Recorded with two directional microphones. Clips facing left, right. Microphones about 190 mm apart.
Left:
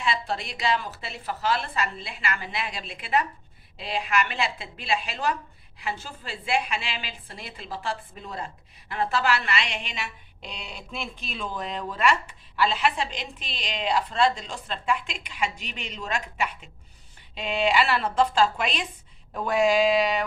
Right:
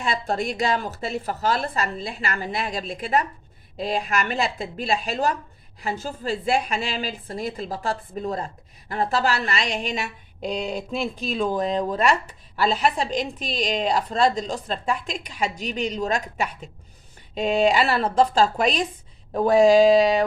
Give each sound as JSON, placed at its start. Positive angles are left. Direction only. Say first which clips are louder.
{"t": 0.0, "sound": "a woman's voice", "louder": "right 4 dB", "side_deg": -45}